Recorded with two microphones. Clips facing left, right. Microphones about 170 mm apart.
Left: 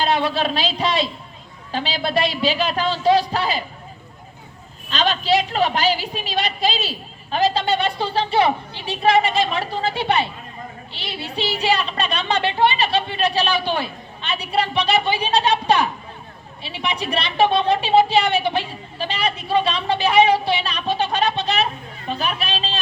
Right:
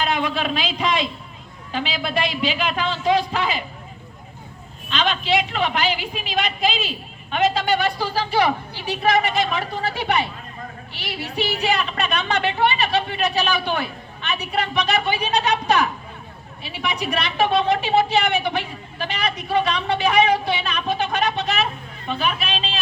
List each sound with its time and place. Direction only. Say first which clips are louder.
0.0 s a man's voice: left 3 dB; 35° left (ahead or behind)
4.9 s a woman's voice: left 2 dB; 40° left (ahead or behind)